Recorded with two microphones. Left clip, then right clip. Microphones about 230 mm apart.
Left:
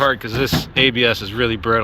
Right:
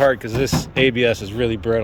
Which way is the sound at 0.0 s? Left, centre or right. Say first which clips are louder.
Even; centre.